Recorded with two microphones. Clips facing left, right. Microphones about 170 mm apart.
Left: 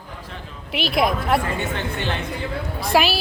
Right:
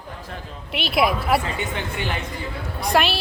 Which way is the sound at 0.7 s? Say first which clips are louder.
Even; centre (ahead or behind).